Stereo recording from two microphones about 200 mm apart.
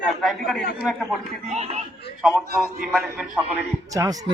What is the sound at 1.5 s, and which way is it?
Speech, 35° right (ahead or behind).